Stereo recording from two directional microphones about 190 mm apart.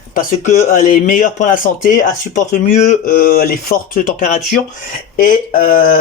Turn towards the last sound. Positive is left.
turn(degrees=45)  # may be behind; listen again after turning